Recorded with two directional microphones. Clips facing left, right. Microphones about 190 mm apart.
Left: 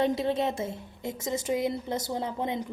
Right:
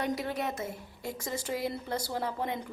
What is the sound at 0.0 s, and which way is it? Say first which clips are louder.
A woman's voice: left 6 dB; 25° left (ahead or behind).